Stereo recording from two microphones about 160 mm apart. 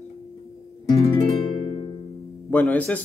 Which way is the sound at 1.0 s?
30° left (ahead or behind).